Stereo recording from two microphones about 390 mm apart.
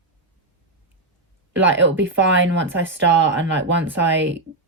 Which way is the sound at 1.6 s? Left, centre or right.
Right.